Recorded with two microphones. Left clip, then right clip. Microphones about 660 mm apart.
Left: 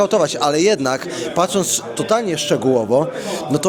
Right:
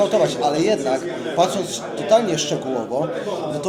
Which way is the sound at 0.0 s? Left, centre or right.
Left.